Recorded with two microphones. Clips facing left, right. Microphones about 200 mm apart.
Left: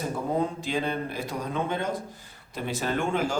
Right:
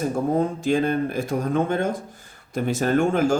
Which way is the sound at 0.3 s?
45° right (ahead or behind).